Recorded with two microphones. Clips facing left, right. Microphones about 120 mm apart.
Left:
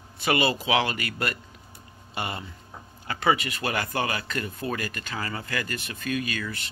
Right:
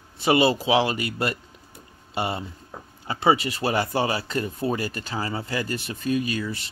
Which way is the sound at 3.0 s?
25° right (ahead or behind).